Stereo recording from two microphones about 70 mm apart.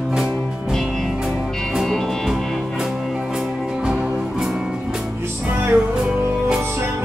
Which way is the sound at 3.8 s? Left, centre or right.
Centre.